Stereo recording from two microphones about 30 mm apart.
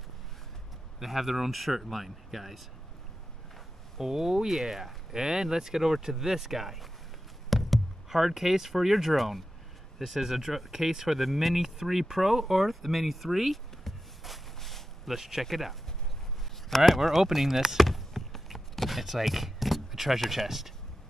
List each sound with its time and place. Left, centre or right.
0.9 s speech: centre
4.0 s speech: centre
7.4 s knock: centre
8.1 s speech: centre
9.1 s speech: centre
13.9 s a sound: centre
15.1 s speech: centre
16.7 s speech: centre
17.3 s speech: centre
17.8 s chop: centre